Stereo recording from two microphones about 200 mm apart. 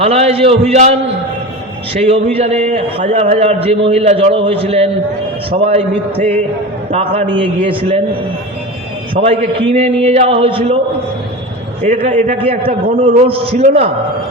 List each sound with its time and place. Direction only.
0.0 s a man's voice: 30° right (ahead or behind)
1.9 s a man's voice: 30° right (ahead or behind)
9.1 s a man's voice: 30° right (ahead or behind)
11.8 s a man's voice: 35° right (ahead or behind)